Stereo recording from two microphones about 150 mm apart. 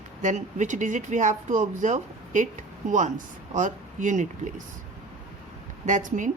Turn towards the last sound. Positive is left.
turn(degrees=-60)  # may be behind; listen again after turning